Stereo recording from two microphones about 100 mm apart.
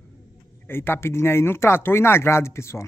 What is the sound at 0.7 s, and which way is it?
Speech, 25° left (ahead or behind).